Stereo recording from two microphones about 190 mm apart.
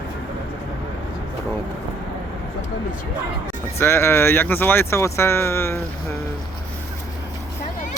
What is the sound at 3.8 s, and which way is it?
Speech, 10° left (ahead or behind).